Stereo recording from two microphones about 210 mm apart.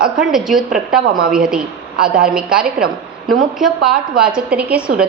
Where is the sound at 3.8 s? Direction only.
45° right (ahead or behind).